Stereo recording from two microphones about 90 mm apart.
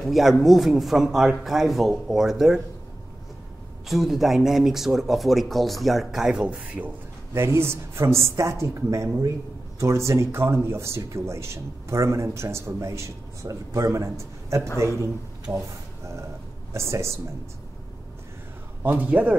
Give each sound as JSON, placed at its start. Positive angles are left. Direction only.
{"t": 0.0, "sound": "speech", "side_deg": 0}
{"t": 3.8, "sound": "speech", "side_deg": 0}
{"t": 7.3, "sound": "speech", "side_deg": -30}
{"t": 16.7, "sound": "speech", "side_deg": -30}
{"t": 18.8, "sound": "a man's voice", "side_deg": -20}